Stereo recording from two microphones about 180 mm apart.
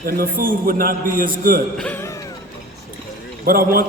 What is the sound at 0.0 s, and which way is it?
A man's voice, 55° right (ahead or behind).